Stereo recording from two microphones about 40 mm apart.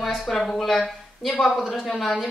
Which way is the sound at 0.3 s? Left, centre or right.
Centre.